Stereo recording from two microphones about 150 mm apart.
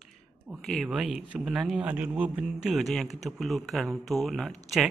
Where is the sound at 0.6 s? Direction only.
Centre (ahead or behind).